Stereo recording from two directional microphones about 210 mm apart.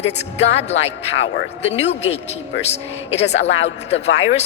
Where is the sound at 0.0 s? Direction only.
30° left (ahead or behind).